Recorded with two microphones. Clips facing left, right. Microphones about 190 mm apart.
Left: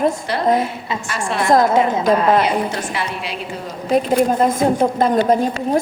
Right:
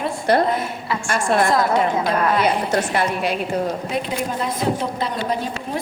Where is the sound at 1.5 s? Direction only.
45° left (ahead or behind).